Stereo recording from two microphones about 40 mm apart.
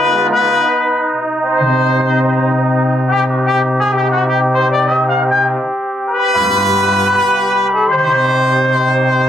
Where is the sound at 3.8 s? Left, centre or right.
Centre.